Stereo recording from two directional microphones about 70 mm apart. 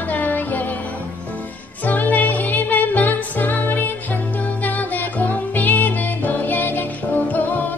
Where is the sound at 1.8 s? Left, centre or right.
Left.